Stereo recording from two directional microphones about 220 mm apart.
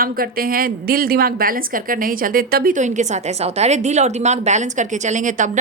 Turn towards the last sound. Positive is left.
turn(degrees=-35)  # may be behind; listen again after turning